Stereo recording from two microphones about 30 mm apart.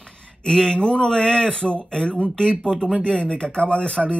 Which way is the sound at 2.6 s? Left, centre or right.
Centre.